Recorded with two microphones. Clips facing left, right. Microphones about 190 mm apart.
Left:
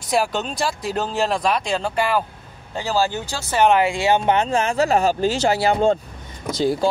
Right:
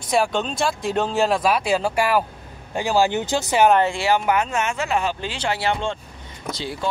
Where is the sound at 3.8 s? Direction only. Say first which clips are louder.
Left 2 dB; 15° left (ahead or behind).